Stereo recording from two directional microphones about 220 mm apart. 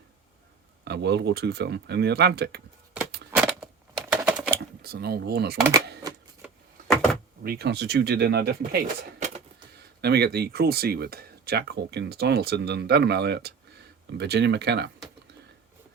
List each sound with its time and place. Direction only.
0.9 s speech: 50° right (ahead or behind)
3.3 s a sound: 5° right (ahead or behind)
4.1 s typing: 5° right (ahead or behind)
4.5 s speech: 45° right (ahead or behind)
6.4 s door: centre (ahead or behind)
7.4 s speech: 45° right (ahead or behind)
9.2 s a sound: 35° right (ahead or behind)
10.0 s speech: 50° right (ahead or behind)